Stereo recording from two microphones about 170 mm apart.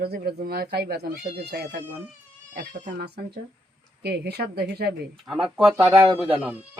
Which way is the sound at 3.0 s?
70° right (ahead or behind).